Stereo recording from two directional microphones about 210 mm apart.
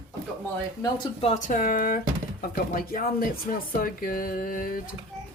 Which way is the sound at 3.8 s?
40° left (ahead or behind).